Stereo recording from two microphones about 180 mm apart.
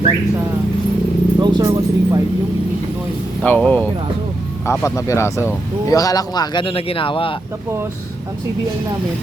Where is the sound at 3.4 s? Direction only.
10° left (ahead or behind); by 7.3 s 30° left (ahead or behind).